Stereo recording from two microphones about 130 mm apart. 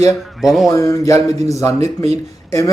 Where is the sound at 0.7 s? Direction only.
25° left (ahead or behind).